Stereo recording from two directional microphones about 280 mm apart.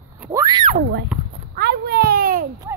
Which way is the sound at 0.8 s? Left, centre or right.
Right.